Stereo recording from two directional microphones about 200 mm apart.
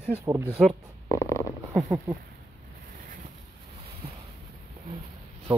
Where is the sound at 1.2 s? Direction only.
15° left (ahead or behind).